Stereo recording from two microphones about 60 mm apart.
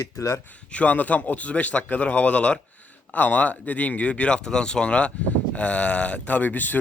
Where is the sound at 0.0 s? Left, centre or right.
Left.